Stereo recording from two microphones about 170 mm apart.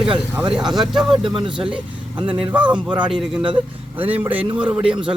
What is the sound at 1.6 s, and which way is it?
A man's voice, 5° right (ahead or behind).